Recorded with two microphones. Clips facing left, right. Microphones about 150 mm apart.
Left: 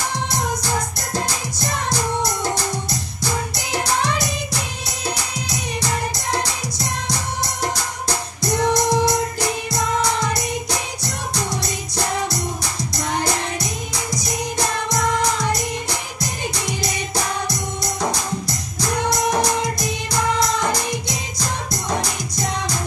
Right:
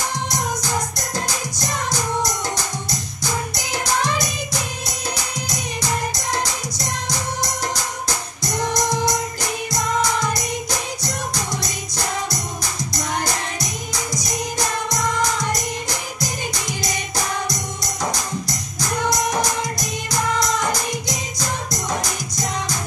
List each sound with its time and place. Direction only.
2.5 s music: 60° left (ahead or behind)
8.5 s music: 60° left (ahead or behind)
10.3 s music: 60° left (ahead or behind)